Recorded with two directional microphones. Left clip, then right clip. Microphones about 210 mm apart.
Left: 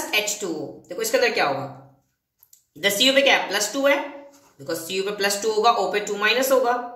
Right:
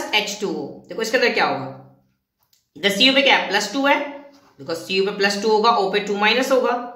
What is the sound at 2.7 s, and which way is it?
Speech, 15° right (ahead or behind).